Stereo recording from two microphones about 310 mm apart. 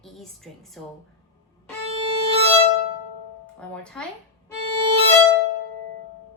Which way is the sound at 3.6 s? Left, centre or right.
Centre.